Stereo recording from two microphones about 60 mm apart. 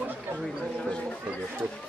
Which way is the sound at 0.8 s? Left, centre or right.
Centre.